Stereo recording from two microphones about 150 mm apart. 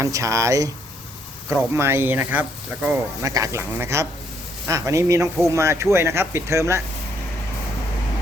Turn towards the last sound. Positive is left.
turn(degrees=-20)  # may be behind; listen again after turning